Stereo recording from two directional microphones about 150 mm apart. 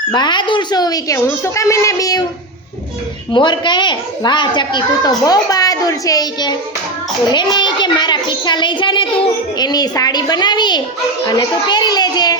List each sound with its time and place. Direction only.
0.1 s a woman's voice: 30° left (ahead or behind)
3.3 s a woman's voice: 30° left (ahead or behind)